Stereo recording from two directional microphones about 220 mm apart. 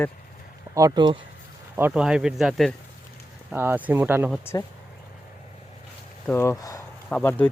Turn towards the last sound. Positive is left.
turn(degrees=10)  # may be behind; listen again after turning